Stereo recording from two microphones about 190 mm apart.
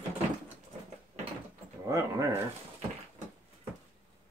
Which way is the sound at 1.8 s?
15° right (ahead or behind).